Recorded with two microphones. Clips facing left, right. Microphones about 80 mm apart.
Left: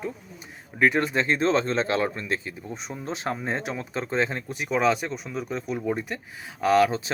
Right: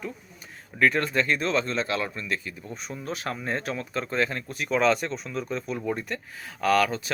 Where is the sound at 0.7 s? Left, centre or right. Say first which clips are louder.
Left 1 dB; centre.